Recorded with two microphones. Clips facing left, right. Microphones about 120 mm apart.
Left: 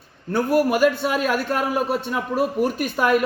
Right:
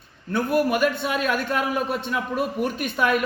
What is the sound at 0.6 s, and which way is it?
A man's voice, 40° left (ahead or behind).